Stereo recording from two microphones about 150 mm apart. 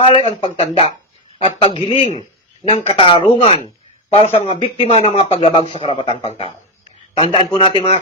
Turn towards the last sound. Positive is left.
turn(degrees=40)  # may be behind; listen again after turning